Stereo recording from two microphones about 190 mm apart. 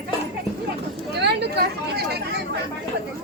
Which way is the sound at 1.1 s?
60° right (ahead or behind).